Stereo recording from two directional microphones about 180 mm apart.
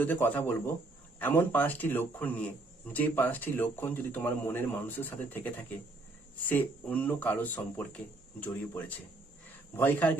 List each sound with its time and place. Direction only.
0.0 s speech: 10° left (ahead or behind)